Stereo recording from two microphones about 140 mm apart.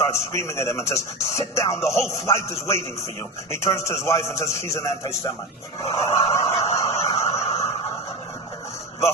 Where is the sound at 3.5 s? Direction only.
20° left (ahead or behind).